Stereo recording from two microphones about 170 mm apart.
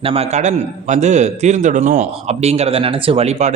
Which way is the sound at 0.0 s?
35° right (ahead or behind).